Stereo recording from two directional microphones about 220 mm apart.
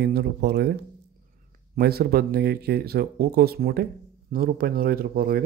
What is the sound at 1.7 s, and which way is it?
Speech, 45° right (ahead or behind).